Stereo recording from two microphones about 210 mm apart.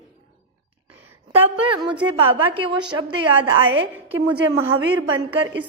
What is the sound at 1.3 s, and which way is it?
A woman's voice, 25° right (ahead or behind).